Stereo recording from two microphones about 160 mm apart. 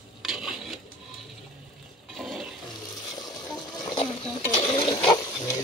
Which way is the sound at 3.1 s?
25° left (ahead or behind).